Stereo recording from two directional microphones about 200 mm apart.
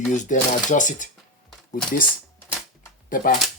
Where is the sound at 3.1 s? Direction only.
45° left (ahead or behind).